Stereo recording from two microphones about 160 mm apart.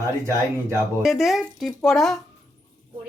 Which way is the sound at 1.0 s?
Centre (ahead or behind).